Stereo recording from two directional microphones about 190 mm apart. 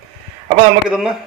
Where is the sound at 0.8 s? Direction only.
5° right (ahead or behind).